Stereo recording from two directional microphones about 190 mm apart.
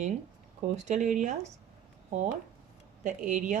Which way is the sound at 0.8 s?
35° right (ahead or behind).